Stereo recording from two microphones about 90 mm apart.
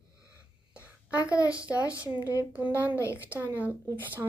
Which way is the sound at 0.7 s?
15° right (ahead or behind).